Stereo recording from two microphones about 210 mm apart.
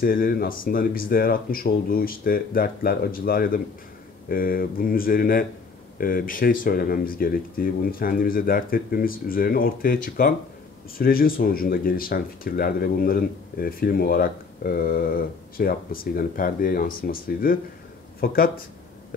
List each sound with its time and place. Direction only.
0.0 s speech: 45° left (ahead or behind)